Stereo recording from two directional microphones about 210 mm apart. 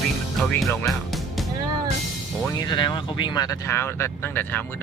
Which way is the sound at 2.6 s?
20° left (ahead or behind).